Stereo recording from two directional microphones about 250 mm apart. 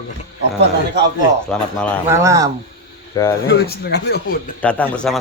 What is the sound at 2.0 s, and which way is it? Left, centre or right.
Speech, centre.